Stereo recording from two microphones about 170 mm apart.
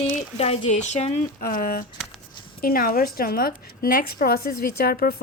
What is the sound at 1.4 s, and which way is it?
A woman's voice, 55° left (ahead or behind).